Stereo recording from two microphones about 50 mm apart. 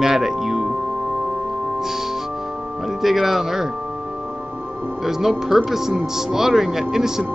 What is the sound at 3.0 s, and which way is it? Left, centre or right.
Speech, centre.